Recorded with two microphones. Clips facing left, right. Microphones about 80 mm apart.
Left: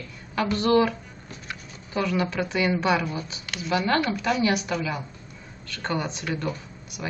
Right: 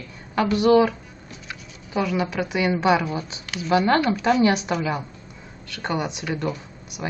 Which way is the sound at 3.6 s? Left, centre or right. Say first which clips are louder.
Right 5 dB; right.